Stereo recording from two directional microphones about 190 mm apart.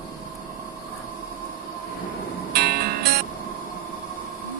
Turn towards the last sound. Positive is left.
turn(degrees=-55)  # may be behind; listen again after turning